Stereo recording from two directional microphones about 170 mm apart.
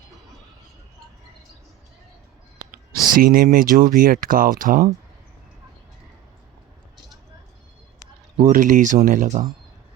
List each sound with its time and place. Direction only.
2.7 s speech: 60° right (ahead or behind)
8.4 s speech: 50° right (ahead or behind)